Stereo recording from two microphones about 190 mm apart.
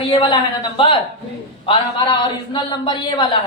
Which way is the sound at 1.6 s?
25° left (ahead or behind).